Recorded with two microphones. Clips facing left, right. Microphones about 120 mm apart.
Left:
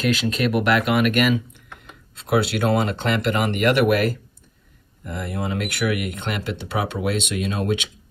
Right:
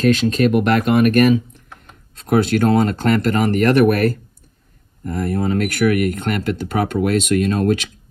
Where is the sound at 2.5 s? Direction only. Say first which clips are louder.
Right 5 dB; 45° right (ahead or behind).